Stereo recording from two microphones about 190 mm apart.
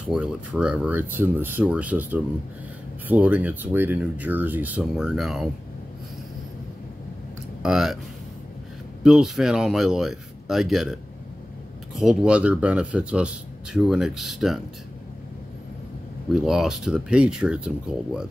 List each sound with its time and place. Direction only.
0.0 s speech: 5° right (ahead or behind)
7.6 s speech: centre (ahead or behind)
9.0 s speech: centre (ahead or behind)
16.3 s speech: centre (ahead or behind)